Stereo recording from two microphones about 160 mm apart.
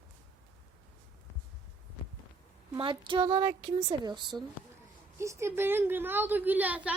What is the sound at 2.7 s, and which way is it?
A woman's voice, 30° right (ahead or behind).